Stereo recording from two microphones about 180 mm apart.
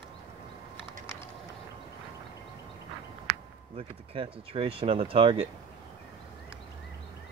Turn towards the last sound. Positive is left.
turn(degrees=-30)  # may be behind; listen again after turning